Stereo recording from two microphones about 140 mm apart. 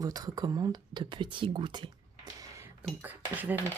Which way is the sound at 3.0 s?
10° right (ahead or behind).